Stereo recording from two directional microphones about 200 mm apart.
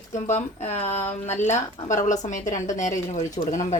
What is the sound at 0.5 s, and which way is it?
Speech, 35° left (ahead or behind).